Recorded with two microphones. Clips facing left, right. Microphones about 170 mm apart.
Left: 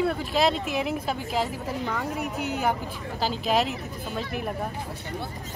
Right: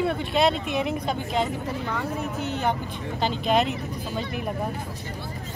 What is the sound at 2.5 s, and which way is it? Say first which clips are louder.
Speech: even; 5° left (ahead or behind).